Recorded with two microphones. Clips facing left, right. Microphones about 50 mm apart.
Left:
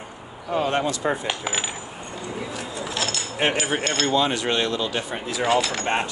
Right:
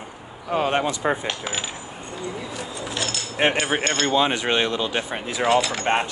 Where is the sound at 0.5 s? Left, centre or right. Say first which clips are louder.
Right 1 dB; right.